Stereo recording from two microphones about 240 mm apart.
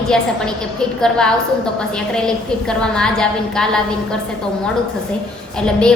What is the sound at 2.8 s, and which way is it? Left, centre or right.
A woman's voice, centre.